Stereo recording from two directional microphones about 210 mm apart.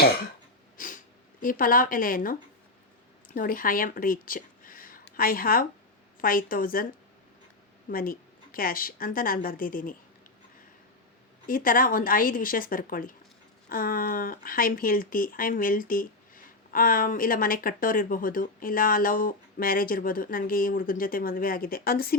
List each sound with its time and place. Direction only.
0.8 s speech: 40° left (ahead or behind)
3.3 s a woman's voice: 40° left (ahead or behind)
7.9 s a woman's voice: 45° left (ahead or behind)
11.4 s speech: 40° left (ahead or behind)